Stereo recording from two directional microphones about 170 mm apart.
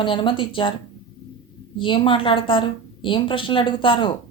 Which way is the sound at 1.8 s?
30° left (ahead or behind).